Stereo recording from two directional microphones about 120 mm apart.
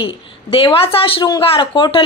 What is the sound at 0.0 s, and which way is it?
Speech, 45° left (ahead or behind).